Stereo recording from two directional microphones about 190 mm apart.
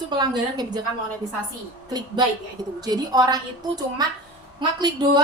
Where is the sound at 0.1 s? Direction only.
20° right (ahead or behind).